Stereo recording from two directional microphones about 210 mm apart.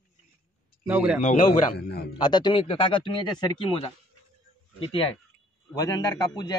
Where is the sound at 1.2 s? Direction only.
35° left (ahead or behind).